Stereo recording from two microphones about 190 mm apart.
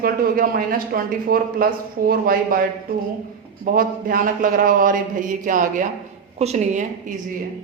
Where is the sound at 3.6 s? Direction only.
45° right (ahead or behind).